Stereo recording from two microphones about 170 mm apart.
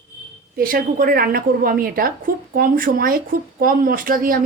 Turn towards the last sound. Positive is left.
turn(degrees=-55)  # may be behind; listen again after turning